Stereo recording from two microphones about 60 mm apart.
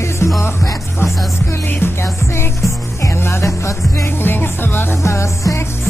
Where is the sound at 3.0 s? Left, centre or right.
Left.